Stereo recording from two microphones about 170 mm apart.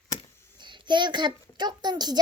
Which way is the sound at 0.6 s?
25° right (ahead or behind).